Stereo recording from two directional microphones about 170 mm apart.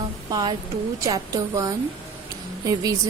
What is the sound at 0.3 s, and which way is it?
A woman's voice, 20° right (ahead or behind).